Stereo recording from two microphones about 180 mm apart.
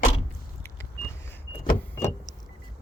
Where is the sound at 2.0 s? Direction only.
15° left (ahead or behind).